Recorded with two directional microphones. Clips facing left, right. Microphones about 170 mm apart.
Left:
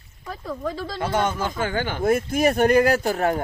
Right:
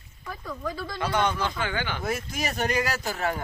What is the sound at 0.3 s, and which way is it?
Speech, 30° left (ahead or behind).